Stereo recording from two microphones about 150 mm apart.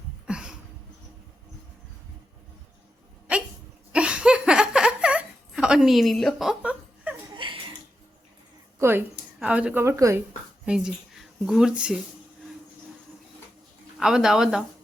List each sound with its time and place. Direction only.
0.3 s a sound: 5° right (ahead or behind)
3.3 s dog: 10° right (ahead or behind)
3.9 s a sound: 5° right (ahead or behind)
7.3 s chuckle: 35° right (ahead or behind)
8.8 s speech: 15° right (ahead or behind)
10.7 s speech: 5° right (ahead or behind)
14.0 s speech: 5° right (ahead or behind)